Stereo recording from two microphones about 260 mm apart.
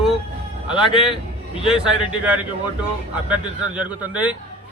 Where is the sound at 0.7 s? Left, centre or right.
Centre.